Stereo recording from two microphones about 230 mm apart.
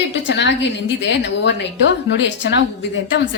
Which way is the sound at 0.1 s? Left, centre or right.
Left.